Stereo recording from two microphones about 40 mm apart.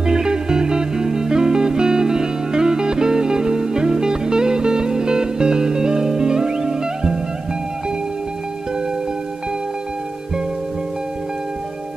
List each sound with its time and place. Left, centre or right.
0.0 s music: centre